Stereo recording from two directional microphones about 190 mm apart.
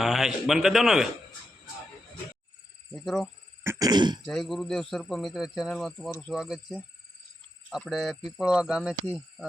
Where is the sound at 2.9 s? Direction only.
Centre (ahead or behind).